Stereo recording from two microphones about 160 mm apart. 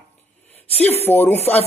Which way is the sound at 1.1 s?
10° left (ahead or behind).